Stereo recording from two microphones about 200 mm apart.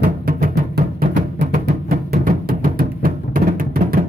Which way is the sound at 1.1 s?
45° right (ahead or behind).